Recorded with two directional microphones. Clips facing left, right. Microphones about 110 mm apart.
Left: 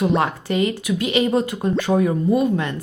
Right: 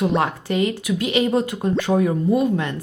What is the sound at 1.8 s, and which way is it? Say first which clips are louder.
Speech: left 1 dB; 20° left (ahead or behind).